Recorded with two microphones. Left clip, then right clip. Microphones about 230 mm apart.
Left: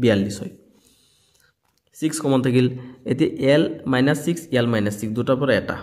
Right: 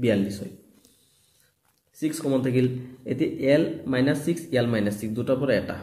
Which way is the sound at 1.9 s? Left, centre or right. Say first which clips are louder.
Left 4 dB; left.